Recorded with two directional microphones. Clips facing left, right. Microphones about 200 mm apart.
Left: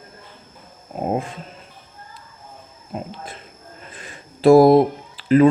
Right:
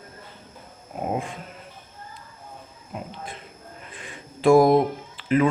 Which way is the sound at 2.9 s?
35° left (ahead or behind).